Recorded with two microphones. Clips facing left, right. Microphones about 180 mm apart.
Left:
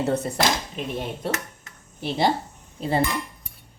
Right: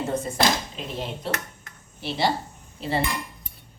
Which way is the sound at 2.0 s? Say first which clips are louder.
Left 3 dB; 50° left (ahead or behind).